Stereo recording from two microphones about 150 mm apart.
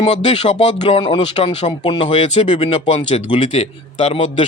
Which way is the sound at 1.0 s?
35° left (ahead or behind).